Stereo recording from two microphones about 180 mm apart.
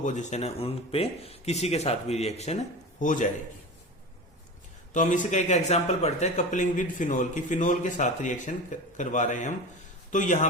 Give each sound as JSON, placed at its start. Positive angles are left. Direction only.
{"t": 0.0, "sound": "speech", "side_deg": 40}
{"t": 4.9, "sound": "a man's voice", "side_deg": 45}